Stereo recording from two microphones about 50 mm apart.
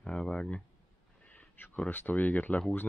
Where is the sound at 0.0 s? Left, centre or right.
Left.